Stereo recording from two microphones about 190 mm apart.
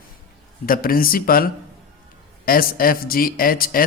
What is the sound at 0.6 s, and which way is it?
Speech, 50° left (ahead or behind).